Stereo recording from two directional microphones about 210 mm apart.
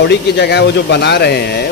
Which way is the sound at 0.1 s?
55° left (ahead or behind).